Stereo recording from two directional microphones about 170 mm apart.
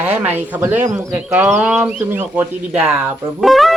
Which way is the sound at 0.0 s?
10° right (ahead or behind).